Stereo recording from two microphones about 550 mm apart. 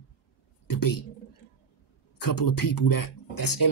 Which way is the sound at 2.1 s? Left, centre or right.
Left.